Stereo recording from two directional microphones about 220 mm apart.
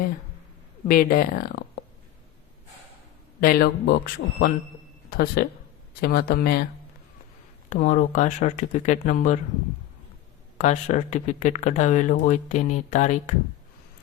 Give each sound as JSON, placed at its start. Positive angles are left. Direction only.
{"t": 0.9, "sound": "speech", "side_deg": 40}
{"t": 3.4, "sound": "speech", "side_deg": 45}
{"t": 7.7, "sound": "speech", "side_deg": 35}
{"t": 10.6, "sound": "speech", "side_deg": 35}